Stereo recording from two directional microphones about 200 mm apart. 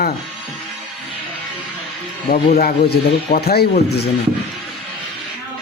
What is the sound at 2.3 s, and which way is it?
A man's voice, 45° left (ahead or behind).